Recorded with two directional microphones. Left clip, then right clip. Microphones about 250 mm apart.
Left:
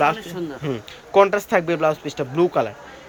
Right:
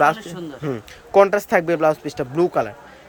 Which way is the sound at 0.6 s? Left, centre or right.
Centre.